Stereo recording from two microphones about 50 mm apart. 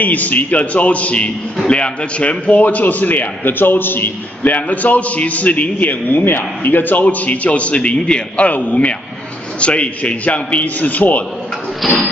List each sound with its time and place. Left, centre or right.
0.0 s a man's voice: left
4.4 s a man's voice: left
8.5 s a man's voice: left
11.8 s a sound: centre